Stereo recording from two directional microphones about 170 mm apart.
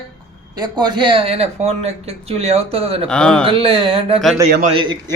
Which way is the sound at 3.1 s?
5° left (ahead or behind).